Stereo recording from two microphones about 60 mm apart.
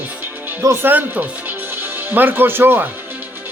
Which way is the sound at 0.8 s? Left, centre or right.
Right.